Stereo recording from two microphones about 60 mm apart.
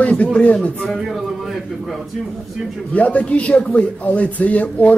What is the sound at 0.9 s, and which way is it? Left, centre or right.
A man's voice, centre.